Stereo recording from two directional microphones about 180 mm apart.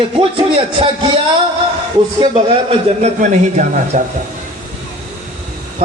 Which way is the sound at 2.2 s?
25° right (ahead or behind).